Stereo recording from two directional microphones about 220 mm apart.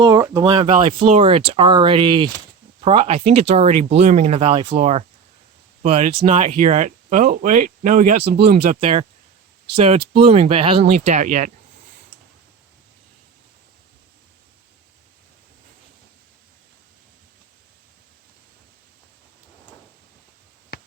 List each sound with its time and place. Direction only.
0.0 s speech: 15° right (ahead or behind); by 8.6 s 45° right (ahead or behind)
8.7 s speech: 30° right (ahead or behind)
20.7 s a sound: 45° left (ahead or behind)